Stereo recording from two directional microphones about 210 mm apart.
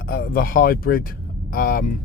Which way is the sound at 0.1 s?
45° left (ahead or behind).